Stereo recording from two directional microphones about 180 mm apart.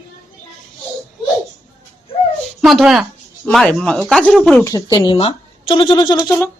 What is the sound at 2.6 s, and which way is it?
Speech, centre (ahead or behind).